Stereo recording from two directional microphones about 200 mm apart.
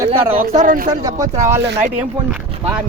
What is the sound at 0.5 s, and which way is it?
Speech, 40° right (ahead or behind).